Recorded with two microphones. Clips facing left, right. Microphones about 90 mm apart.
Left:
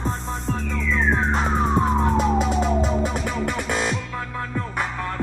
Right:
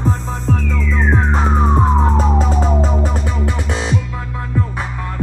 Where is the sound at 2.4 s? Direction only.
35° right (ahead or behind).